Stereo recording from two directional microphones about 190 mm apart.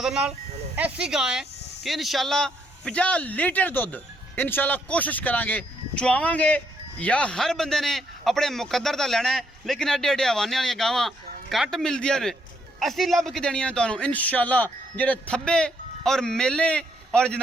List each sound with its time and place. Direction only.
0.0 s a man's voice: 5° right (ahead or behind)